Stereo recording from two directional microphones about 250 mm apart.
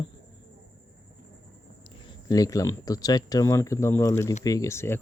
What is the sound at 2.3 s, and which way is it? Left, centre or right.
Speech, centre.